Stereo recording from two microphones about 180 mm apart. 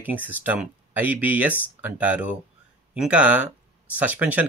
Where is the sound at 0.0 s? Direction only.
10° right (ahead or behind).